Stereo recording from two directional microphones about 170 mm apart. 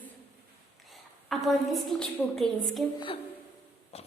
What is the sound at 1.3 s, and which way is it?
A woman's voice, centre (ahead or behind).